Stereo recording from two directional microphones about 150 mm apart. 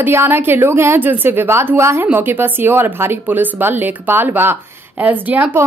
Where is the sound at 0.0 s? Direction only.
15° right (ahead or behind).